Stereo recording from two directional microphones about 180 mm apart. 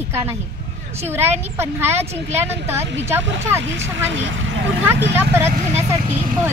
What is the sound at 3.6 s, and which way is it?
Speech, 90° right.